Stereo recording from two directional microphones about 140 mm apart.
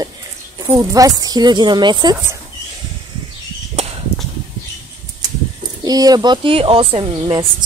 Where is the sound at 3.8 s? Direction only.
50° right (ahead or behind).